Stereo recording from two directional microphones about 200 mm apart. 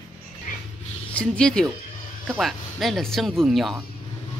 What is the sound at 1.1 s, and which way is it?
Speech, 5° left (ahead or behind).